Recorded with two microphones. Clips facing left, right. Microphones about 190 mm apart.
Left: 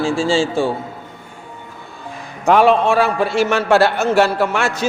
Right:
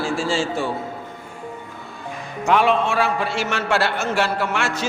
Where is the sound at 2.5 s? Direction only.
35° left (ahead or behind).